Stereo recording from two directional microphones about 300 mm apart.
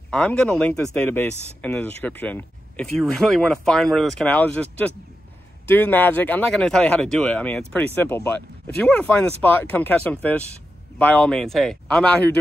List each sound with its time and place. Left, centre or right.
0.1 s speech: centre